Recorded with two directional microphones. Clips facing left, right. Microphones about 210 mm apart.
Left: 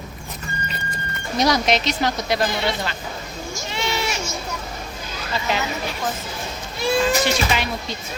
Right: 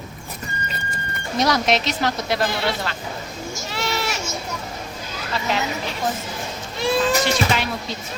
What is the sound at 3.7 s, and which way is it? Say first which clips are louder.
Goat: left 1 dB; centre (ahead or behind).